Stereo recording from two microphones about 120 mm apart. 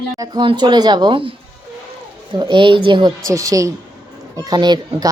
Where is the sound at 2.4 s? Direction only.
40° right (ahead or behind).